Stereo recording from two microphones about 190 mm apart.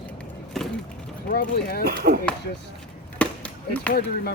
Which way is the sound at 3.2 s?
5° left (ahead or behind).